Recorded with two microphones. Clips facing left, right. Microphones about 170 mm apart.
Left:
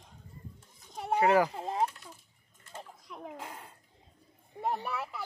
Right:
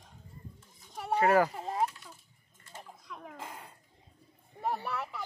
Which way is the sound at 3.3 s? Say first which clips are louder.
Even; 5° left (ahead or behind).